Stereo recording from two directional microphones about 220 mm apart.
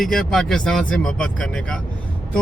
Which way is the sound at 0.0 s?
Centre (ahead or behind).